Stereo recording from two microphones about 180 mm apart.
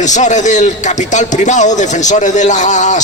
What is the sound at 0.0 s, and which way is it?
A man's voice, 40° left (ahead or behind).